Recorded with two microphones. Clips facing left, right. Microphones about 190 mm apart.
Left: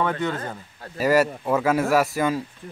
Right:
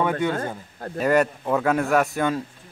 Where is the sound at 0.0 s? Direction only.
10° right (ahead or behind).